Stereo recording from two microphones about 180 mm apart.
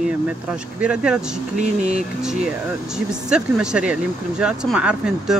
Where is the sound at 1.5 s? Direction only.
40° right (ahead or behind).